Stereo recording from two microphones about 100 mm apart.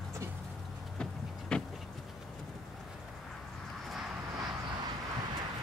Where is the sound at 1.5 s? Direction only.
10° left (ahead or behind).